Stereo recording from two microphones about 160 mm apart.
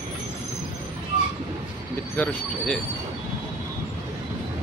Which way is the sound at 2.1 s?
10° left (ahead or behind).